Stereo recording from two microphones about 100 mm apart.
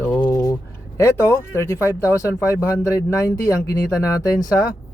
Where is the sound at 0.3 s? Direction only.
35° left (ahead or behind).